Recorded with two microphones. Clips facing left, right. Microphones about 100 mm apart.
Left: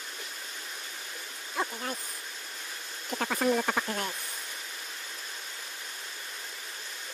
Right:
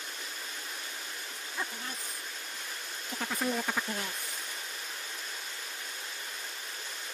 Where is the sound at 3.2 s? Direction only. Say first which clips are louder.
Left 6 dB; 60° left (ahead or behind).